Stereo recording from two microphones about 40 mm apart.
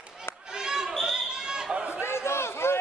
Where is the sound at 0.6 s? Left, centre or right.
Centre.